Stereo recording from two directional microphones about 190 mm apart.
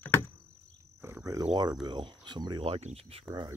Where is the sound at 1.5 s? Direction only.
20° right (ahead or behind).